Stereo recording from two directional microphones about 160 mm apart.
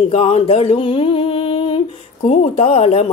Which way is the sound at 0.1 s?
40° left (ahead or behind).